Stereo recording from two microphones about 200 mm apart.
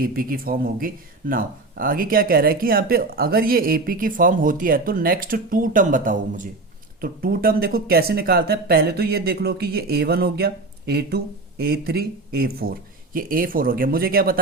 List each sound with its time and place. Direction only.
0.0 s speech: 45° right (ahead or behind)